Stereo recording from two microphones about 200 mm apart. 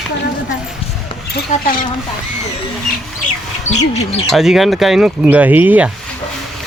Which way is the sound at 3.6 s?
35° left (ahead or behind).